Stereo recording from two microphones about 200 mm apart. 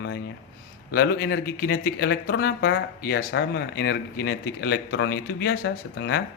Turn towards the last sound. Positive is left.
turn(degrees=60)  # may be behind; listen again after turning